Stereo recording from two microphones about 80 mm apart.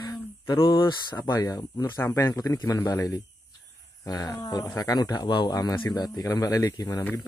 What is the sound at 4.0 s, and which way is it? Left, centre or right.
Speech, left.